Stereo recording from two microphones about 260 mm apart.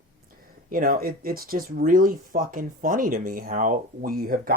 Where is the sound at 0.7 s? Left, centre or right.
Right.